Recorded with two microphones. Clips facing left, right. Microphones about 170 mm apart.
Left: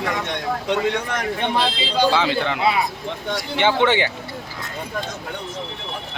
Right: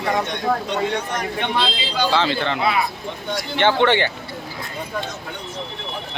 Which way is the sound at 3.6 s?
10° left (ahead or behind).